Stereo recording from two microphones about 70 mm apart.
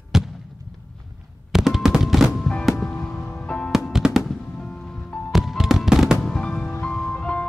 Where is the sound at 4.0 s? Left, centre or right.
Centre.